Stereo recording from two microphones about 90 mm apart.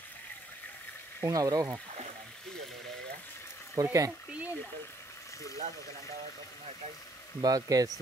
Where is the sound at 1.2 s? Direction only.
40° right (ahead or behind).